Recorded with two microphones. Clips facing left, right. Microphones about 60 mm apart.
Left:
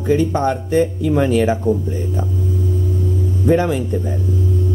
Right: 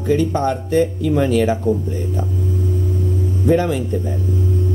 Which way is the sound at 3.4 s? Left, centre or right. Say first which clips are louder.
Left 1 dB; centre.